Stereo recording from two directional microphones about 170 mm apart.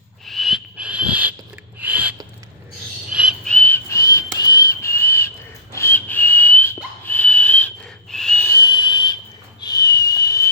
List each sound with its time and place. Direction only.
0.3 s frog: centre (ahead or behind)
1.8 s a sound: 10° right (ahead or behind)
3.1 s frog: 5° right (ahead or behind)
3.4 s whistling: 10° left (ahead or behind)
7.0 s a sound: 10° left (ahead or behind)
8.1 s whistle: 5° left (ahead or behind)